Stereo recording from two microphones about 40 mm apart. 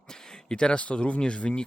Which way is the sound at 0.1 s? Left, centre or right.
Centre.